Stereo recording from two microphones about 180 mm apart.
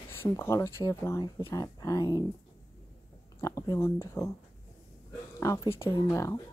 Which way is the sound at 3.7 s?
15° left (ahead or behind).